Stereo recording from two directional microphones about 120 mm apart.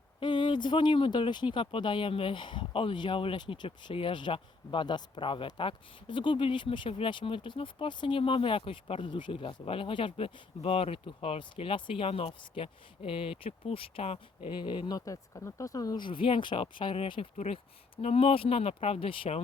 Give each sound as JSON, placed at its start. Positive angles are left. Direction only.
{"t": 0.2, "sound": "speech", "side_deg": 40}
{"t": 14.5, "sound": "speech", "side_deg": 40}